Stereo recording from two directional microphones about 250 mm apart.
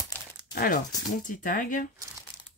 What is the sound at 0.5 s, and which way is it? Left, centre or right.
Speech, left.